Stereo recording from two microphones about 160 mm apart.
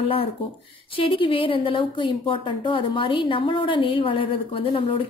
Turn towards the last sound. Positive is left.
turn(degrees=35)  # may be behind; listen again after turning